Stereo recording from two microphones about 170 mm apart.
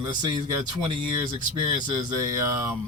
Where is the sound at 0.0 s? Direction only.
25° right (ahead or behind).